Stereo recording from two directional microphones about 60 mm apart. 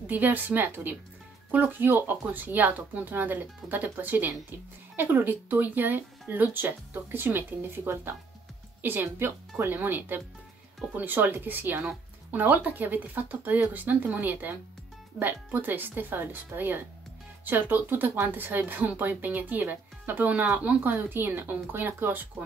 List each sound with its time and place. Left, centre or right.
0.0 s speech: right